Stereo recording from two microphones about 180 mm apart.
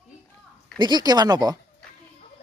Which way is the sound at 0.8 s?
25° right (ahead or behind).